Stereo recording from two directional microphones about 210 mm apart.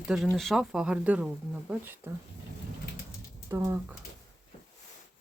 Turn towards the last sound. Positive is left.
turn(degrees=-15)  # may be behind; listen again after turning